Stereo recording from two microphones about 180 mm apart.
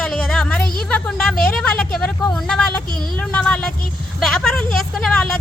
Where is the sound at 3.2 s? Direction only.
5° left (ahead or behind).